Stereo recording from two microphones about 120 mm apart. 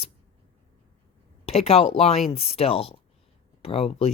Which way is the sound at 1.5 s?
55° left (ahead or behind).